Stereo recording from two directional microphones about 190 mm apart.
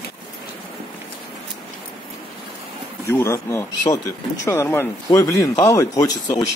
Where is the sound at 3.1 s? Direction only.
15° left (ahead or behind).